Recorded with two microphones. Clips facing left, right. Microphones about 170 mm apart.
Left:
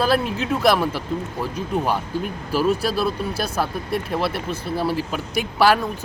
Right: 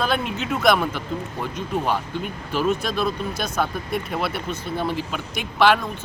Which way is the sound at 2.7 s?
35° left (ahead or behind).